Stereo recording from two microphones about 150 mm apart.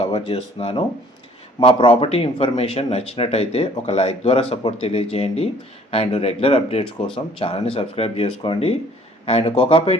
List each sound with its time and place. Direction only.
0.0 s speech: 35° left (ahead or behind)